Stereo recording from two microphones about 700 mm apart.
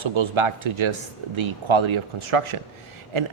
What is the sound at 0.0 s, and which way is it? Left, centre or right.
Speech, right.